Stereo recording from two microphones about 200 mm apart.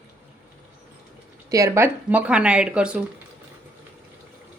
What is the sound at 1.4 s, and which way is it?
Speech, 15° right (ahead or behind).